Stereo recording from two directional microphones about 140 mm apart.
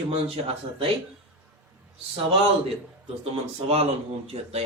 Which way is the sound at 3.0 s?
45° right (ahead or behind).